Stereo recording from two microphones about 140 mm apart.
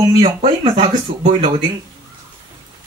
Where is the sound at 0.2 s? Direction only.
35° right (ahead or behind).